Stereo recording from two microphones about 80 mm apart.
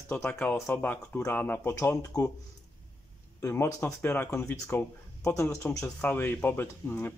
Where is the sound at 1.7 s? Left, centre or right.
Left.